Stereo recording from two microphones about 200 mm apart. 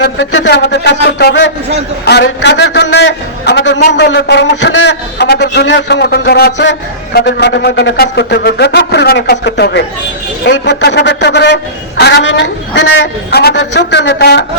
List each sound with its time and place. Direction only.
0.0 s a man's voice: 65° left (ahead or behind)